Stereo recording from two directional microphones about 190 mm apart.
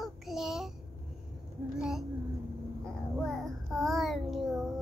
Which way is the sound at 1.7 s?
5° right (ahead or behind).